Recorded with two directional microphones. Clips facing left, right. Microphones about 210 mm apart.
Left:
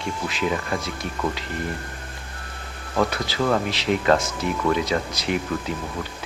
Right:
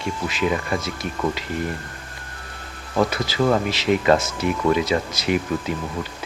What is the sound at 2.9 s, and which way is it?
Speech, 5° right (ahead or behind).